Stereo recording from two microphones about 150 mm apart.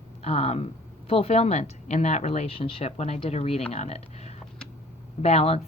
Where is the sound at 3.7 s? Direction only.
45° left (ahead or behind).